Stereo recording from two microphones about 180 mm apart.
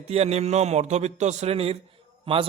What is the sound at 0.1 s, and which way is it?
A man's voice, 35° right (ahead or behind).